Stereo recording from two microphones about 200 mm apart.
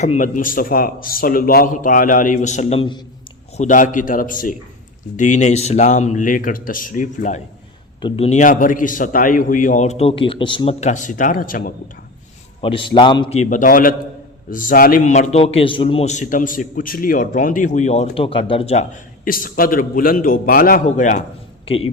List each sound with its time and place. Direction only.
0.0 s a man's voice: 40° left (ahead or behind)
3.6 s a man's voice: 40° left (ahead or behind)
12.6 s a man's voice: 25° left (ahead or behind)